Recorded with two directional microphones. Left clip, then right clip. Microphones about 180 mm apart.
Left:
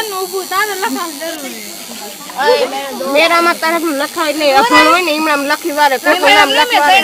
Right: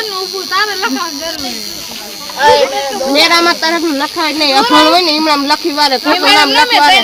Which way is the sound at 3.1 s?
35° right (ahead or behind).